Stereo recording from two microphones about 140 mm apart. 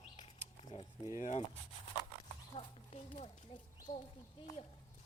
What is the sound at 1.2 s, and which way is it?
Speech, 55° left (ahead or behind).